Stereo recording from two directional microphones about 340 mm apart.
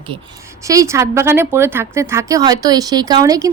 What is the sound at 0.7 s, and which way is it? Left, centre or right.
A woman's voice, centre.